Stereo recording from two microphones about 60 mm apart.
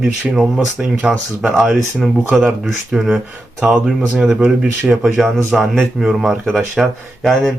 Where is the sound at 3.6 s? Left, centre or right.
Right.